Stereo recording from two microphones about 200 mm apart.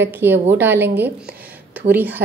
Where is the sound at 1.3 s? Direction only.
10° right (ahead or behind).